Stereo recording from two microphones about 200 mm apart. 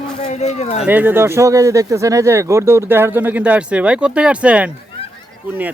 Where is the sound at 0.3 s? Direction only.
35° left (ahead or behind).